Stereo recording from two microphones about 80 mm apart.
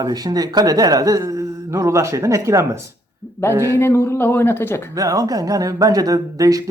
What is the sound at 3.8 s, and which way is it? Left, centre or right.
Speech, left.